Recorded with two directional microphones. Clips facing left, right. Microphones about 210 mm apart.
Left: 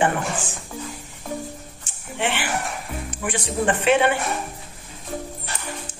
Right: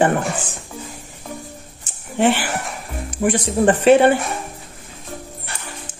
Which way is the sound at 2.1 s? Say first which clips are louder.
Right 7 dB; 40° right (ahead or behind).